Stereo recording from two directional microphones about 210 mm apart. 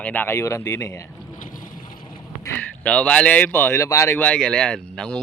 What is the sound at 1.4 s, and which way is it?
Boat, 40° left (ahead or behind).